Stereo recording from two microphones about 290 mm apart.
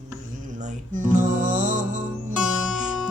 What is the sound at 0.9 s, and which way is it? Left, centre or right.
Music, right.